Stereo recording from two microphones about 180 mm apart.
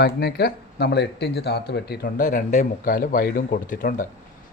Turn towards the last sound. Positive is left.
turn(degrees=50)  # may be behind; listen again after turning